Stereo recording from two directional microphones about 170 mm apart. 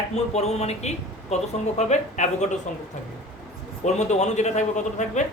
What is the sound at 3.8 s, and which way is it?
Speech, 45° left (ahead or behind).